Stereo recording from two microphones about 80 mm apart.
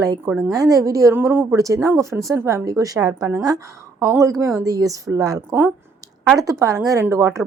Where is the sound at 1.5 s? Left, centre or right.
Right.